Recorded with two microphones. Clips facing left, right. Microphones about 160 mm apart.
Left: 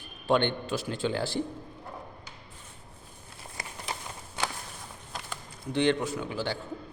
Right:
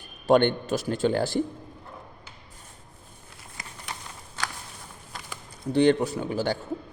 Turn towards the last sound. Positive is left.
turn(degrees=-45)  # may be behind; listen again after turning